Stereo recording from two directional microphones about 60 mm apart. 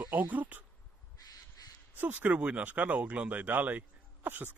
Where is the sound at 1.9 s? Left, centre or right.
Right.